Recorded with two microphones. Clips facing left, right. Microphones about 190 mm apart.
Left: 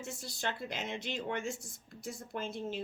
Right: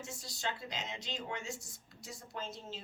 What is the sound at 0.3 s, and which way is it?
A woman's voice, 55° left (ahead or behind).